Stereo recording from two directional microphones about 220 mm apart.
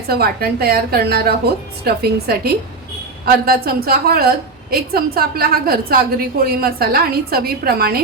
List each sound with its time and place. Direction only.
0.1 s a woman's voice: 45° right (ahead or behind)